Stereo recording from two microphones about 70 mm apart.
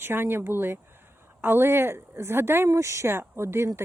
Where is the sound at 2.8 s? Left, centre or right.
Right.